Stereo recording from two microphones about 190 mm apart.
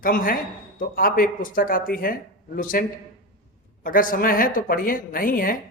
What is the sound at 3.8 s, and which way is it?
A man's voice, 45° left (ahead or behind).